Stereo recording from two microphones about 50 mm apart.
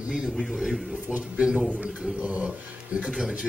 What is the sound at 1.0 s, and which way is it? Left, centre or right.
Speech, right.